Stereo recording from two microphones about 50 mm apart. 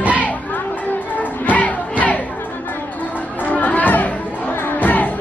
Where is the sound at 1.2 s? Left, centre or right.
Left.